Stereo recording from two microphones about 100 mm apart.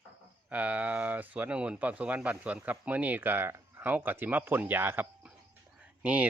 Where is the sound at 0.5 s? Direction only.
15° right (ahead or behind).